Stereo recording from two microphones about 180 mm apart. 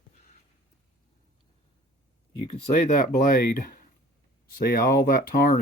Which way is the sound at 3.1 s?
55° left (ahead or behind).